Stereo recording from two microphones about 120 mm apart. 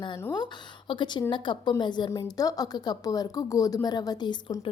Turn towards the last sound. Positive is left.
turn(degrees=35)  # may be behind; listen again after turning